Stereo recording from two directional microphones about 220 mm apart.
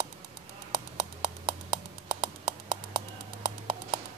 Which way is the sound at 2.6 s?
15° right (ahead or behind).